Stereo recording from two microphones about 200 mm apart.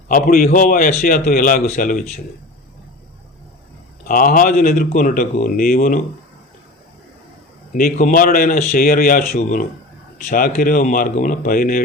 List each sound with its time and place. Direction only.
0.1 s a man's voice: 45° left (ahead or behind)
4.0 s a man's voice: 45° left (ahead or behind)
7.7 s a man's voice: 45° left (ahead or behind)